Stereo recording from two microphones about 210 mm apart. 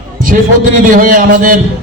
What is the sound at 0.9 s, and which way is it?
Speech, 40° right (ahead or behind).